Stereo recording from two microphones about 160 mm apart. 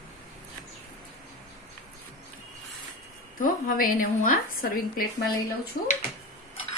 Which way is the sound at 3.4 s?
60° left (ahead or behind).